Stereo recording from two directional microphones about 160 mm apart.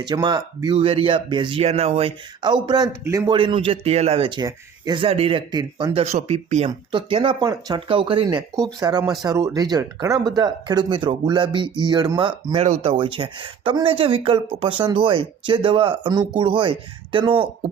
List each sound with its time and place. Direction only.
0.0 s speech: 25° right (ahead or behind)
3.3 s speech: 35° right (ahead or behind)
5.5 s speech: 25° right (ahead or behind)
12.6 s speech: 40° right (ahead or behind)